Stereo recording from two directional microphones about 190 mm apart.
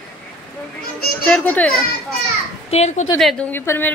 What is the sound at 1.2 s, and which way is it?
Speech, 5° left (ahead or behind).